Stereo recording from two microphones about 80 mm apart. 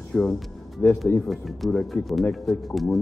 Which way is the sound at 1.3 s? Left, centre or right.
Centre.